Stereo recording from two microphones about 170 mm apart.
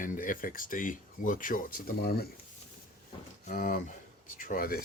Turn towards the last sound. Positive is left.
turn(degrees=60)  # may be behind; listen again after turning